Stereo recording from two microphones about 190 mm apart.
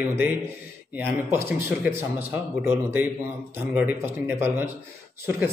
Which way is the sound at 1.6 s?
10° right (ahead or behind).